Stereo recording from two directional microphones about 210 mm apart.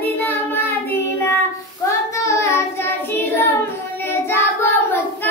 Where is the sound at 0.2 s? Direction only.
10° left (ahead or behind).